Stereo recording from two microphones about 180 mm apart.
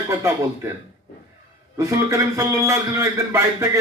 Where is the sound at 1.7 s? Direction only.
15° right (ahead or behind).